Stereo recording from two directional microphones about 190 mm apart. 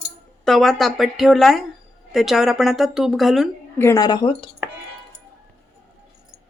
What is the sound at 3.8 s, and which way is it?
Speech, 15° left (ahead or behind).